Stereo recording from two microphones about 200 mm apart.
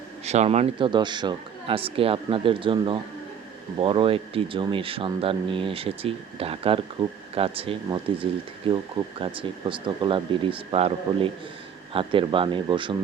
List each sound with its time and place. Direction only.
0.3 s speech: 35° right (ahead or behind)